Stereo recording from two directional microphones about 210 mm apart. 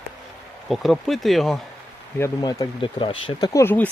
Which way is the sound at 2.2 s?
20° left (ahead or behind).